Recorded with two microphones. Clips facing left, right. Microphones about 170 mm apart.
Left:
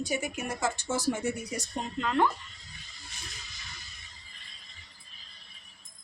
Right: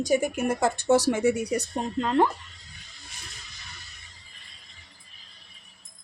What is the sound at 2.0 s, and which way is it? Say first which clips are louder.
Speech: right 4 dB; 35° right (ahead or behind).